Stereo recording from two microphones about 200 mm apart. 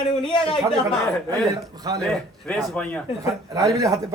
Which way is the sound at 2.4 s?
5° left (ahead or behind).